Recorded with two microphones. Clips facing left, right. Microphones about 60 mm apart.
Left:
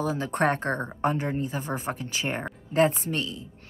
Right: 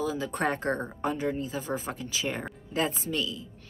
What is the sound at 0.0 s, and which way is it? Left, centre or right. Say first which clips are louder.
Speech: left 4 dB; left.